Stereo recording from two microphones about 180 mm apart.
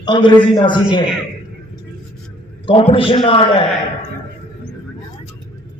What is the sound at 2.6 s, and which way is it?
A man's voice, 30° left (ahead or behind).